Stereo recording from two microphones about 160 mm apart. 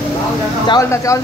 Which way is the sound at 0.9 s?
20° left (ahead or behind).